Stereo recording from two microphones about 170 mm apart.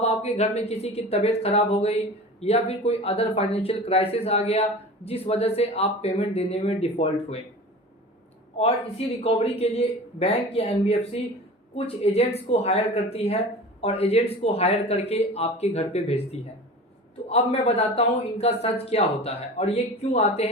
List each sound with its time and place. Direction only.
0.0 s speech: 40° left (ahead or behind)
8.5 s speech: 35° left (ahead or behind)